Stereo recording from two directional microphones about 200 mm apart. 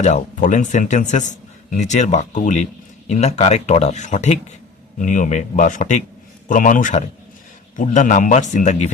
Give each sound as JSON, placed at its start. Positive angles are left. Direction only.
{"t": 0.0, "sound": "speech", "side_deg": 35}